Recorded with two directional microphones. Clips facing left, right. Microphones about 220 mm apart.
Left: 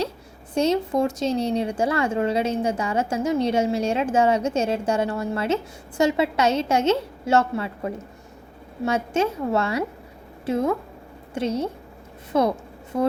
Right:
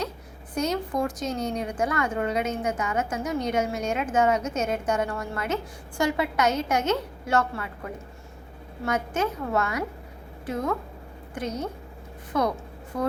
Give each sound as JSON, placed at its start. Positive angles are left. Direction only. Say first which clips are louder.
{"t": 0.5, "sound": "speech", "louder": "left 6 dB", "side_deg": 25}
{"t": 8.8, "sound": "speech", "louder": "left 4 dB", "side_deg": 25}